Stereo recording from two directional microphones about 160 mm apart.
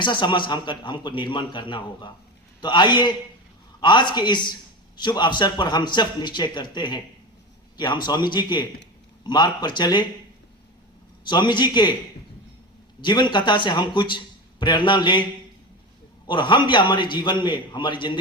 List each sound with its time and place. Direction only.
0.0 s a man's voice: 30° left (ahead or behind)
11.2 s a man's voice: 30° left (ahead or behind)
13.0 s a man's voice: 30° left (ahead or behind)
16.2 s a man's voice: 30° left (ahead or behind)